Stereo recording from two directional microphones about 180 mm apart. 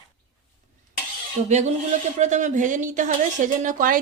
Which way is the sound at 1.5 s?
40° right (ahead or behind).